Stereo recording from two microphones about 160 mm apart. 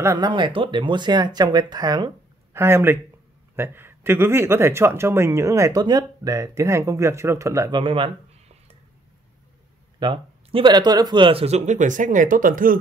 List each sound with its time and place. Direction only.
0.0 s speech: 20° right (ahead or behind)
0.3 s speech: 30° right (ahead or behind)
7.7 s a sound: 35° right (ahead or behind)
9.9 s speech: 30° right (ahead or behind); by 12.7 s 60° right (ahead or behind)